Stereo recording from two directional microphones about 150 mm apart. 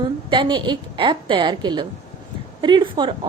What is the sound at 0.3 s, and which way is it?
A woman's voice, 30° right (ahead or behind).